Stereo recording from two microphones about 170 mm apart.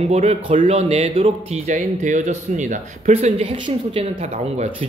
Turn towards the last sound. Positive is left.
turn(degrees=-40)  # may be behind; listen again after turning